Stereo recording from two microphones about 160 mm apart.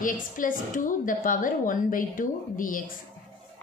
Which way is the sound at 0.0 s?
55° left (ahead or behind).